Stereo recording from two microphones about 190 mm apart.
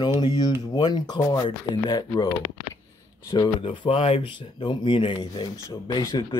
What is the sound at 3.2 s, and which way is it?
Speech, 20° left (ahead or behind).